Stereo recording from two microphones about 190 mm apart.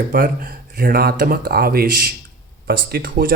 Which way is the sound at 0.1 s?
50° right (ahead or behind).